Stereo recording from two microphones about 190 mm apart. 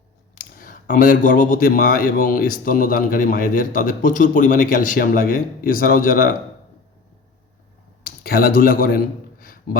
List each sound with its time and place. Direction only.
0.3 s speech: 45° left (ahead or behind)
8.0 s speech: 50° left (ahead or behind)